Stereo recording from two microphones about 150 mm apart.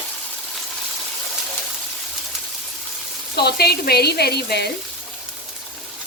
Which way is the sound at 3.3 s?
90° left.